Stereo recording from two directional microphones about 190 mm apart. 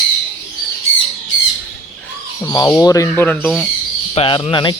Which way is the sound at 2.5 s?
15° left (ahead or behind).